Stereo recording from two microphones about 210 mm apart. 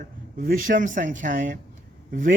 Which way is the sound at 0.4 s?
40° right (ahead or behind).